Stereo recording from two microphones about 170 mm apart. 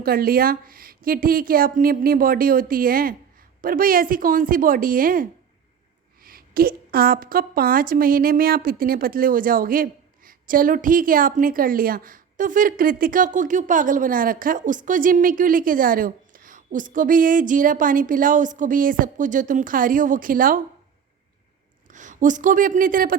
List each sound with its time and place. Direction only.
0.0 s a woman's voice: 60° right (ahead or behind)
21.9 s a woman's voice: 45° right (ahead or behind)